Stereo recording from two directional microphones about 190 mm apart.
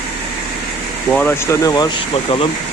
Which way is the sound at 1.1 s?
10° left (ahead or behind).